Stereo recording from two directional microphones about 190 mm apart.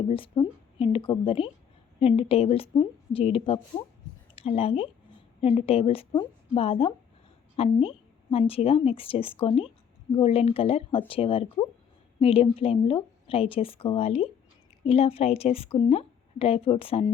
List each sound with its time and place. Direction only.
0.1 s a woman's voice: 30° left (ahead or behind)